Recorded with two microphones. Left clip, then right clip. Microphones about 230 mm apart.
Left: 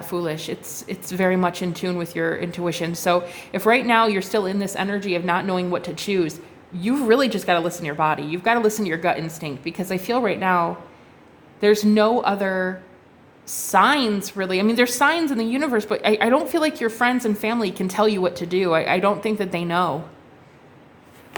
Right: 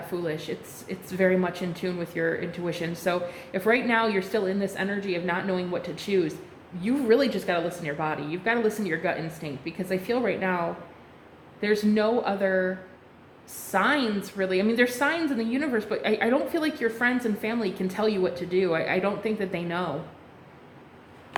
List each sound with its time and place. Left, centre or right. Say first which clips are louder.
0.1 s a woman's voice: left 5 dB; left